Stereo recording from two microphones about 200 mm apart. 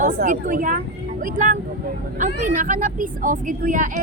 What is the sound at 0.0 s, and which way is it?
Speech, 40° right (ahead or behind).